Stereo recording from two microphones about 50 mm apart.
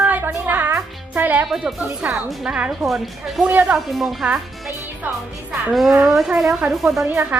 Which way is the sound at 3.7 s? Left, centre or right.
Centre.